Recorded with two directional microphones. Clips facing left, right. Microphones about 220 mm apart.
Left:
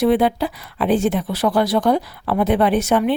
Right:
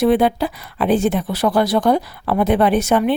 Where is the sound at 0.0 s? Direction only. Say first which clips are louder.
Right 1 dB; 45° right (ahead or behind).